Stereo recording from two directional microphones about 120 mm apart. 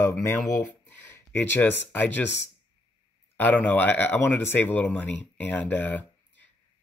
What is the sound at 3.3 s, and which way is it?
Speech, 15° left (ahead or behind).